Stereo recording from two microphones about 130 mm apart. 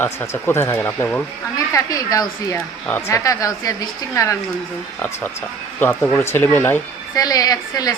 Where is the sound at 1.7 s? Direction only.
25° left (ahead or behind).